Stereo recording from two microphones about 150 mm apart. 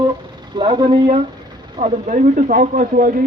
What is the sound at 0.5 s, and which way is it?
Speech, 30° right (ahead or behind).